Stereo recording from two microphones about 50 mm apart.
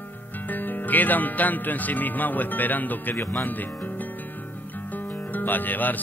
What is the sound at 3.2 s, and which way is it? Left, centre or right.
Speech, left.